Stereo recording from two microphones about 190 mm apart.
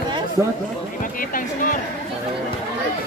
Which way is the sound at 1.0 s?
45° left (ahead or behind).